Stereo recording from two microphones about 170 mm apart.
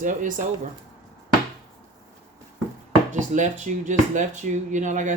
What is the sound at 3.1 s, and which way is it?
Speech, 45° right (ahead or behind).